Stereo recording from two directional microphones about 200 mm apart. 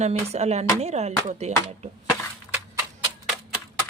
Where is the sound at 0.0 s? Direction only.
30° right (ahead or behind).